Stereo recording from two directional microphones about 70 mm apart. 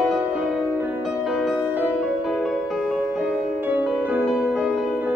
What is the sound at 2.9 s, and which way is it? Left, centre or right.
Music, centre.